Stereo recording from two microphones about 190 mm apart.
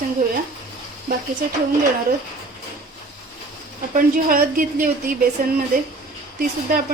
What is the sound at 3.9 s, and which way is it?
Speech, 50° right (ahead or behind).